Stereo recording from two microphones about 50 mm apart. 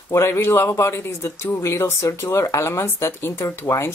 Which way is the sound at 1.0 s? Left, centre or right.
Left.